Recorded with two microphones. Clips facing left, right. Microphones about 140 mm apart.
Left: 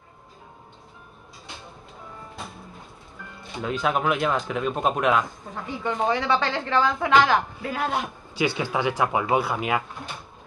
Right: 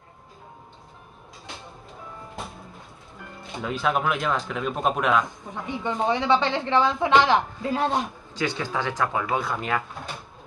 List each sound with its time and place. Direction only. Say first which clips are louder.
3.6 s speech: left 1 dB; centre (ahead or behind)
5.5 s a woman's voice: even; 20° right (ahead or behind)
8.4 s speech: left 3 dB; 10° left (ahead or behind)